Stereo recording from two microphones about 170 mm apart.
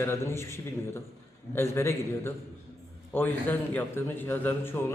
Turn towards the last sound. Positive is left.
turn(degrees=10)  # may be behind; listen again after turning